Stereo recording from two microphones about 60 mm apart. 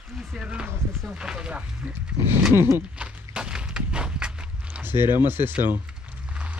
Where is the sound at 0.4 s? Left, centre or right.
Centre.